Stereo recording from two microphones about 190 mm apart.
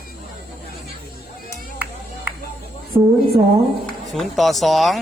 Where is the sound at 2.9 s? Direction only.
25° right (ahead or behind).